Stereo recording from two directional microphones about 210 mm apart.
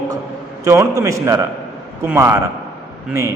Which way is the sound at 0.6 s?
15° right (ahead or behind).